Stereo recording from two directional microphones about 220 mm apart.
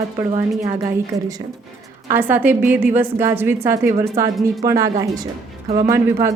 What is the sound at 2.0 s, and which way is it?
A woman's voice, 10° right (ahead or behind).